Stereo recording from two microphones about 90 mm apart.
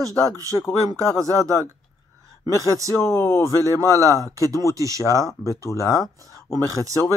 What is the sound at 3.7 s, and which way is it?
Speech, 35° right (ahead or behind).